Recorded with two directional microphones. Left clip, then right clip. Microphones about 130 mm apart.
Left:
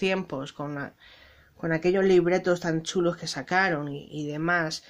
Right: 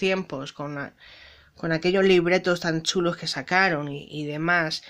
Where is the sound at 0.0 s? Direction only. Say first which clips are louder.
Right 2 dB; centre (ahead or behind).